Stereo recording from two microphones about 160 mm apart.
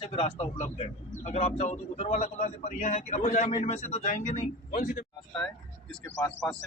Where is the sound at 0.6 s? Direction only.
50° left (ahead or behind).